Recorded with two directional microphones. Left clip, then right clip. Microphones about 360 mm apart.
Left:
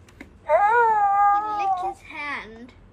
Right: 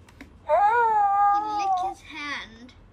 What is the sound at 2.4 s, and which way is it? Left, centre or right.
Babbling, right.